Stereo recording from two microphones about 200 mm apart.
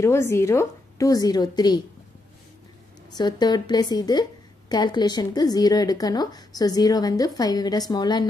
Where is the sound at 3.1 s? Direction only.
20° left (ahead or behind).